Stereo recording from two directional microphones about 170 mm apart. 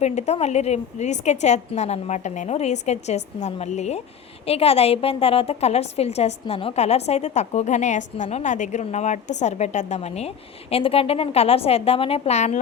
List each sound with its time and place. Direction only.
0.0 s a woman's voice: 40° left (ahead or behind)